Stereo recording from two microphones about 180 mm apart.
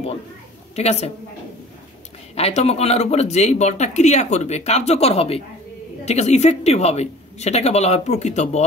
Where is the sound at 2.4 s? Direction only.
35° left (ahead or behind).